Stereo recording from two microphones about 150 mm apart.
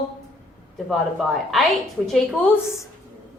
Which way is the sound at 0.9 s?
Centre (ahead or behind).